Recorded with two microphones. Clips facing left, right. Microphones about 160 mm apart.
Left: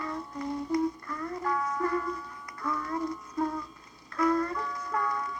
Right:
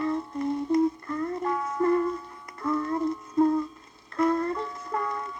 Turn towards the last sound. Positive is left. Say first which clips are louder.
# right 1 dB
turn(degrees=-25)  # may be behind; listen again after turning